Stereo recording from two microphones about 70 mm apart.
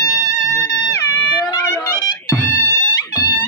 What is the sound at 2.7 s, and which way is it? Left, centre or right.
Music, left.